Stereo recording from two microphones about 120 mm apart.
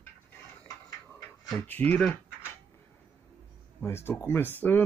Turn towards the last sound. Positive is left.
turn(degrees=15)  # may be behind; listen again after turning